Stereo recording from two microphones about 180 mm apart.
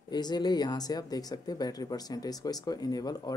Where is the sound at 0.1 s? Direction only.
25° left (ahead or behind).